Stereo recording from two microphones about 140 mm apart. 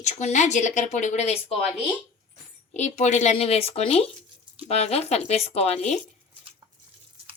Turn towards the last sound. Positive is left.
turn(degrees=-30)  # may be behind; listen again after turning